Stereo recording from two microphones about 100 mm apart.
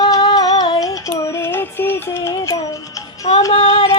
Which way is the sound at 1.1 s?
20° left (ahead or behind).